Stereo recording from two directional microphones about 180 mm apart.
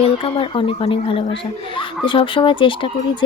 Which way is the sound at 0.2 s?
30° left (ahead or behind).